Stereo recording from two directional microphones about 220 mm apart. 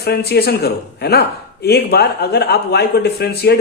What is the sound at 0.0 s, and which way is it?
Speech, 45° left (ahead or behind).